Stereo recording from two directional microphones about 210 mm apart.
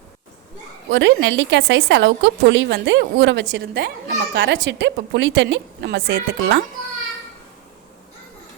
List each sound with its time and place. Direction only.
0.9 s speech: 60° right (ahead or behind)